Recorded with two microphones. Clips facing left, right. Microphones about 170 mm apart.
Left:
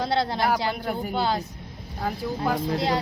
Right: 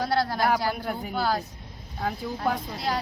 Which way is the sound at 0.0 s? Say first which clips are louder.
Left 1 dB; 25° left (ahead or behind).